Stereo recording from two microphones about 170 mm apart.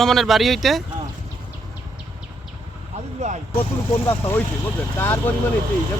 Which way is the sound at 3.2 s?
40° right (ahead or behind).